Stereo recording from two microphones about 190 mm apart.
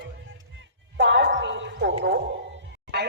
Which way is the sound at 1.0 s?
70° right (ahead or behind).